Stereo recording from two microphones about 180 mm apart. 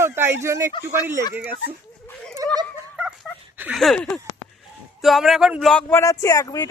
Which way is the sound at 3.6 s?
Centre (ahead or behind).